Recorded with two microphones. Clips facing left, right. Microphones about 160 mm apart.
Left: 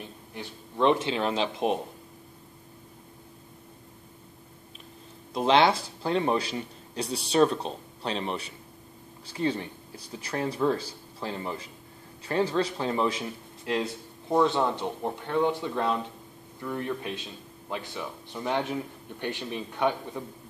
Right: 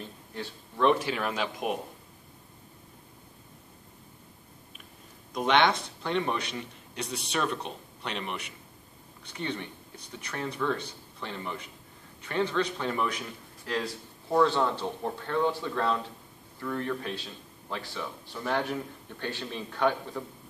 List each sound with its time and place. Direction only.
0.0 s speech: 15° left (ahead or behind)
5.3 s a man's voice: 30° left (ahead or behind)